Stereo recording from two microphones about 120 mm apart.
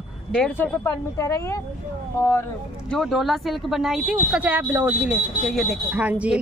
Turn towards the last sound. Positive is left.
turn(degrees=-10)  # may be behind; listen again after turning